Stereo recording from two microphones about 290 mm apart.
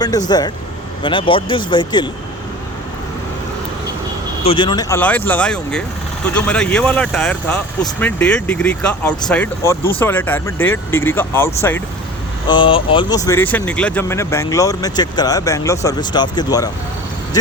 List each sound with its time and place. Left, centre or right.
0.3 s speech: centre
4.4 s speech: centre